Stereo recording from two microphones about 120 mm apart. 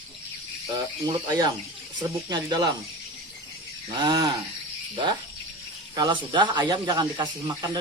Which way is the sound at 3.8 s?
40° right (ahead or behind).